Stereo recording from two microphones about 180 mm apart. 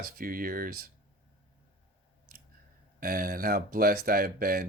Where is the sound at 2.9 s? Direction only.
55° right (ahead or behind).